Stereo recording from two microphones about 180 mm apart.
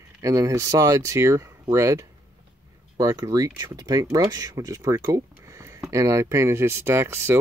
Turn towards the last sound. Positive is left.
turn(degrees=-15)  # may be behind; listen again after turning